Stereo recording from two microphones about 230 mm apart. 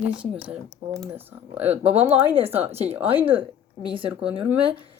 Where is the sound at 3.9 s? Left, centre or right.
Right.